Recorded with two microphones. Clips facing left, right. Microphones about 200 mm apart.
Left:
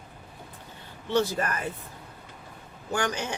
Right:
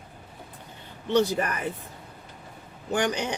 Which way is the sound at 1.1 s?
15° right (ahead or behind).